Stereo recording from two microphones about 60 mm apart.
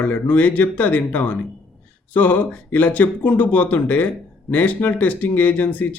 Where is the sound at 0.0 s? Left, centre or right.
Left.